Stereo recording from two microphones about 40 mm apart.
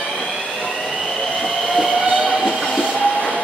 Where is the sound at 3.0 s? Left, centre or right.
Left.